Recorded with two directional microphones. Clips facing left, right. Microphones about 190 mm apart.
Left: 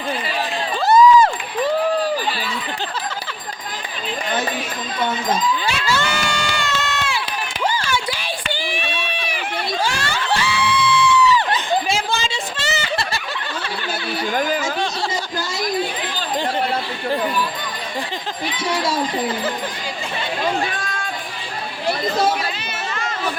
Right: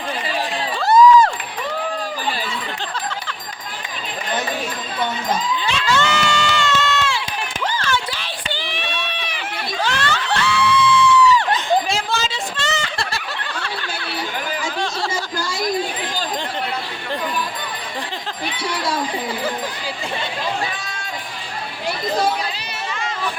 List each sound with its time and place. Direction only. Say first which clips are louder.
0.8 s crowd: even; centre (ahead or behind)
5.6 s run: right 2 dB; 10° left (ahead or behind)
9.8 s crowd: right 1 dB; 10° left (ahead or behind)
15.1 s a sound: even; 20° left (ahead or behind)